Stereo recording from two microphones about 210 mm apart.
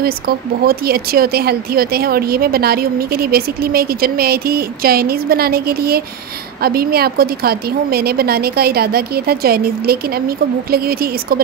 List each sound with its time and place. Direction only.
0.7 s speech: 45° right (ahead or behind)